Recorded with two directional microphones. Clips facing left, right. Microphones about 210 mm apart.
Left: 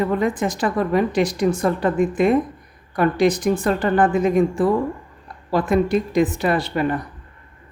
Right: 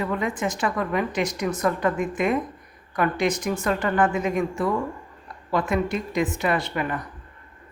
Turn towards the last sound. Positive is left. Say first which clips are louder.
# left 5 dB
turn(degrees=35)  # may be behind; listen again after turning